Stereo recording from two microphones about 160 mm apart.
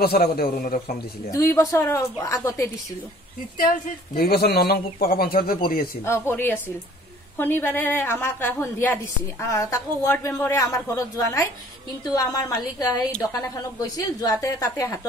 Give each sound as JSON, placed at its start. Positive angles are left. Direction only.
{"t": 0.0, "sound": "speech", "side_deg": 75}
{"t": 1.3, "sound": "a woman's voice", "side_deg": 20}
{"t": 3.5, "sound": "speech", "side_deg": 60}
{"t": 6.0, "sound": "a woman's voice", "side_deg": 15}